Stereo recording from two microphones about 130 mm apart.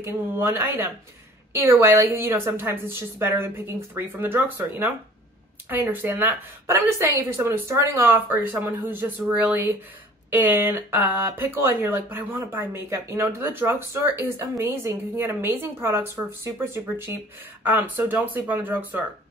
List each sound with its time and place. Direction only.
0.0 s speech: 20° right (ahead or behind)